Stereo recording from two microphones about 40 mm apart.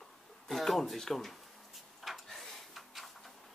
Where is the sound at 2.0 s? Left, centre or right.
Centre.